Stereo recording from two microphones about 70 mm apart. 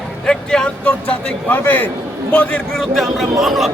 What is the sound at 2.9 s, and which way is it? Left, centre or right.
Speech, centre.